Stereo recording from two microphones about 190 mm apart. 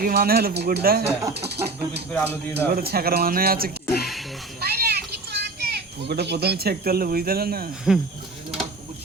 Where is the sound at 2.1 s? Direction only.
5° left (ahead or behind).